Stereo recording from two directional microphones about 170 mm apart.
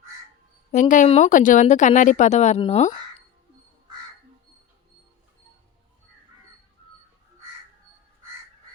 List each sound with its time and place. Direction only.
0.7 s speech: 50° left (ahead or behind)